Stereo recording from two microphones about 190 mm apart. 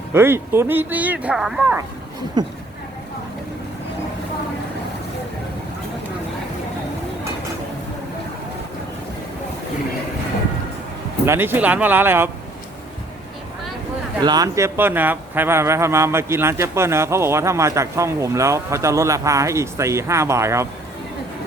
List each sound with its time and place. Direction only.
0.1 s speech: 10° right (ahead or behind)
2.4 s speech: 20° right (ahead or behind)
11.3 s speech: 10° right (ahead or behind)
14.2 s speech: 20° right (ahead or behind)